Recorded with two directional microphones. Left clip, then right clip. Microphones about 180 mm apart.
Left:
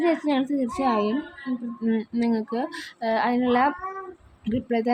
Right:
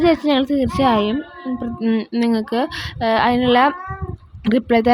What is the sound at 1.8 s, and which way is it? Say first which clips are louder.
A woman's voice: right 6 dB; 20° right (ahead or behind).